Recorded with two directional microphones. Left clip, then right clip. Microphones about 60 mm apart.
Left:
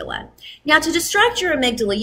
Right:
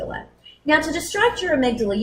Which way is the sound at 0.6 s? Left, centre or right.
Left.